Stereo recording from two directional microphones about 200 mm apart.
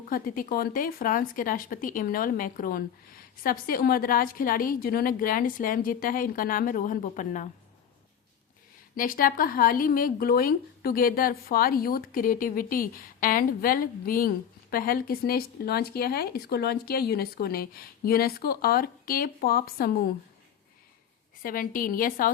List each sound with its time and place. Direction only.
0.1 s speech: 45° left (ahead or behind)
9.0 s speech: 45° left (ahead or behind)
21.4 s speech: 45° left (ahead or behind)